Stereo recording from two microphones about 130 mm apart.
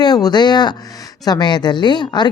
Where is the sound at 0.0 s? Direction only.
35° left (ahead or behind).